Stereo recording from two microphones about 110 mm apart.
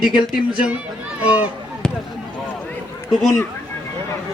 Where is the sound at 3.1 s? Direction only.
5° left (ahead or behind).